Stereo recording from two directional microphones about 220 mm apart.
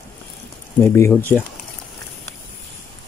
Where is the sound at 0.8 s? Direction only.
10° left (ahead or behind).